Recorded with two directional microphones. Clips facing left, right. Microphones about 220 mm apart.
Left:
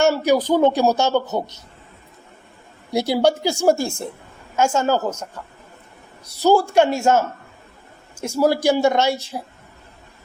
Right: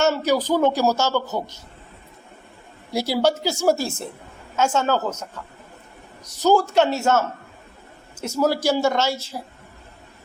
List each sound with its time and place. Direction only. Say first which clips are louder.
0.0 s speech: left 3 dB; 10° left (ahead or behind)
2.9 s speech: left 3 dB; 15° left (ahead or behind)